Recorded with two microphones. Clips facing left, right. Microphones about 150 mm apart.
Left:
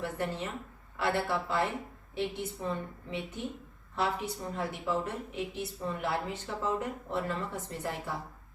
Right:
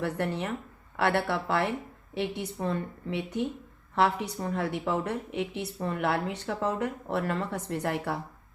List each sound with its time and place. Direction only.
0.0 s a woman's voice: 65° right (ahead or behind)